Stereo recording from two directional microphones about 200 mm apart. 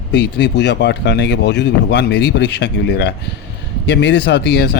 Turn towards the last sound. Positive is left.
turn(degrees=55)  # may be behind; listen again after turning